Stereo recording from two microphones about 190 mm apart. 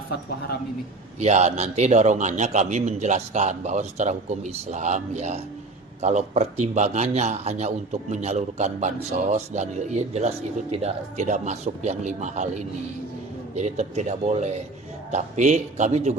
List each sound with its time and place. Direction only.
0.1 s speech: 55° left (ahead or behind)
1.2 s a man's voice: 35° right (ahead or behind)